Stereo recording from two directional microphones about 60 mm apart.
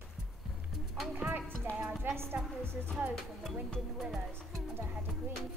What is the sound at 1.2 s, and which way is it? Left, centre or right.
A woman's voice, right.